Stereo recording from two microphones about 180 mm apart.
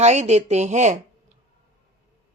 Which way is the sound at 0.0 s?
40° right (ahead or behind).